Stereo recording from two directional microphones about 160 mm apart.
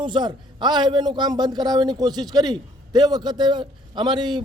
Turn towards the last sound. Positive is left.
turn(degrees=-30)  # may be behind; listen again after turning